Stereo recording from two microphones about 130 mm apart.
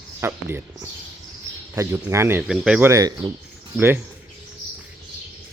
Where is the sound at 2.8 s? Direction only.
25° right (ahead or behind).